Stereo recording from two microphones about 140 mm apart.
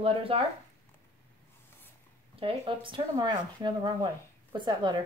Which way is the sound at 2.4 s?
40° right (ahead or behind).